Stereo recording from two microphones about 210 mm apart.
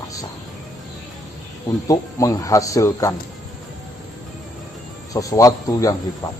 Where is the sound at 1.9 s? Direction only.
15° left (ahead or behind).